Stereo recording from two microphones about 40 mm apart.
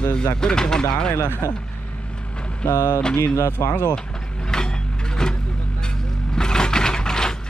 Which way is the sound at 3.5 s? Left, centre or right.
Left.